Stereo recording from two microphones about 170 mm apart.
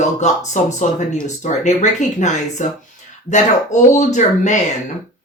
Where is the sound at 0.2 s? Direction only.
45° left (ahead or behind).